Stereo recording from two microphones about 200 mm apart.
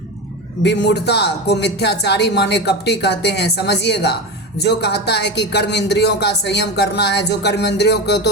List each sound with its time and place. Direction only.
0.6 s speech: 60° left (ahead or behind)